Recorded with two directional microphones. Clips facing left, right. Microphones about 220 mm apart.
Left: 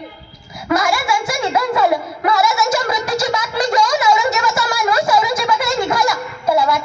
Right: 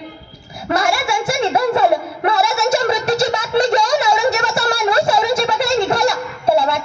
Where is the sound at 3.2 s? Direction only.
30° right (ahead or behind).